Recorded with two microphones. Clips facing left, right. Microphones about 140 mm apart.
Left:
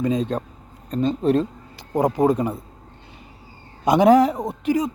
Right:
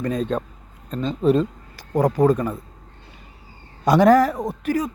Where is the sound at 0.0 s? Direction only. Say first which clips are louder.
Left 2 dB; 15° left (ahead or behind).